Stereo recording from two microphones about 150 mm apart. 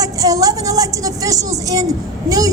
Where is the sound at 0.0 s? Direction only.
25° right (ahead or behind).